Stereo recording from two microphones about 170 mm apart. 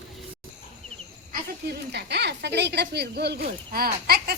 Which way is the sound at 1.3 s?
75° right (ahead or behind).